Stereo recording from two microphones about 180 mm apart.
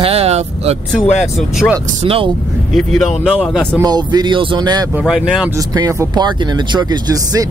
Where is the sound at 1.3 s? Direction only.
Centre (ahead or behind).